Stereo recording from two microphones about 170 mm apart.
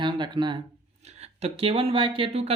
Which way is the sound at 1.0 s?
40° right (ahead or behind).